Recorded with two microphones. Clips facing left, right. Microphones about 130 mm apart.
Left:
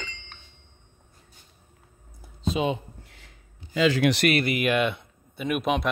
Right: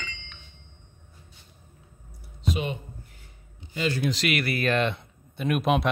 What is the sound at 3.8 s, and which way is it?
Speech, 90° left.